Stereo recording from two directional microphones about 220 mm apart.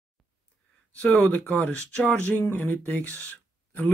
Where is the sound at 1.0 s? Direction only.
5° left (ahead or behind).